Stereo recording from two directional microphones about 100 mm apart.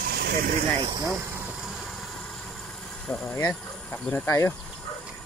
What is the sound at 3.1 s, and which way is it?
Speech, 15° left (ahead or behind).